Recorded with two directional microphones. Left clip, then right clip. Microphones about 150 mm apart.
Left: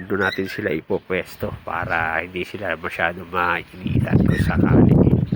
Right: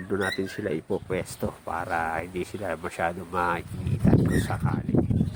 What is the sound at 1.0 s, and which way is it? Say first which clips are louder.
Speech: left 5 dB; centre (ahead or behind).